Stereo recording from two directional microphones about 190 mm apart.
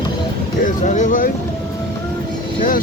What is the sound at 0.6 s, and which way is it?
Speech, 40° left (ahead or behind).